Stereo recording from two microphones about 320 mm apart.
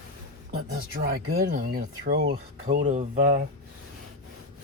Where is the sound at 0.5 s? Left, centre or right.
Right.